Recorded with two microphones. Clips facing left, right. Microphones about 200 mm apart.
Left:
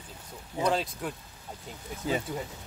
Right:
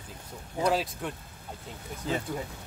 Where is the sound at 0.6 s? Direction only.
5° right (ahead or behind).